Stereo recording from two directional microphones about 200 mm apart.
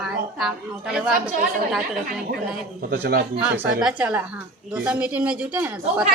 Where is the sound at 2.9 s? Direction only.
50° right (ahead or behind).